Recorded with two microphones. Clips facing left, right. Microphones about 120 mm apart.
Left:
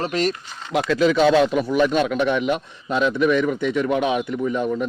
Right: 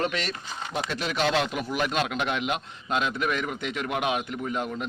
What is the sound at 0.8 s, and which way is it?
Speech, 90° left.